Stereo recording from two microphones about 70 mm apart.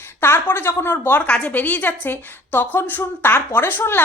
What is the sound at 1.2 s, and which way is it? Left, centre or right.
A woman's voice, centre.